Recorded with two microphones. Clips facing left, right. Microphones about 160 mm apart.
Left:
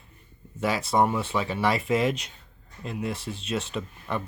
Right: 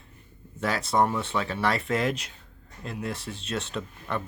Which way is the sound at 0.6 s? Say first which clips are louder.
Left 1 dB; centre (ahead or behind).